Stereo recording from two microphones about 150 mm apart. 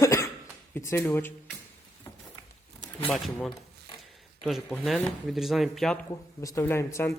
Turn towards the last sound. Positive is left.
turn(degrees=20)  # may be behind; listen again after turning